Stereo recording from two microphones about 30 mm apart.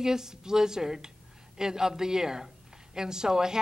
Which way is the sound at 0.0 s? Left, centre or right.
Centre.